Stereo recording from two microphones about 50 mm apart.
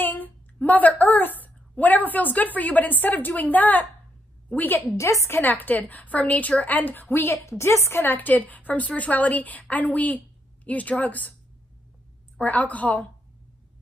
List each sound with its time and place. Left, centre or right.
0.0 s a woman's voice: left
4.9 s a woman's voice: left
5.4 s a woman's voice: left
7.1 s a woman's voice: left
8.0 s a woman's voice: left
12.4 s a woman's voice: left